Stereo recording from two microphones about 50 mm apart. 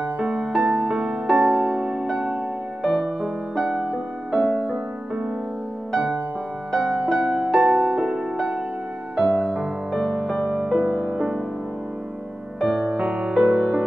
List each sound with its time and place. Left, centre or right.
0.0 s music: centre
3.8 s music: centre
5.9 s music: centre
9.9 s music: centre
12.5 s music: centre
12.8 s music: centre